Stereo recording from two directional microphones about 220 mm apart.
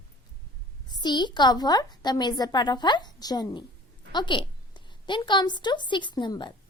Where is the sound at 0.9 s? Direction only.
20° left (ahead or behind).